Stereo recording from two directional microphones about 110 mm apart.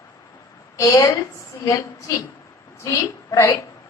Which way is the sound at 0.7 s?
30° left (ahead or behind).